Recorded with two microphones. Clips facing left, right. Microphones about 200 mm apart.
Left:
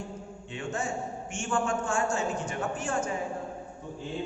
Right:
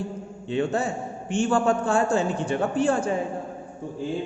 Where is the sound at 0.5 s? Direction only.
35° right (ahead or behind).